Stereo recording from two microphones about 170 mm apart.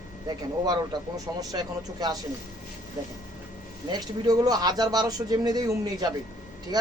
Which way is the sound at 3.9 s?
20° right (ahead or behind).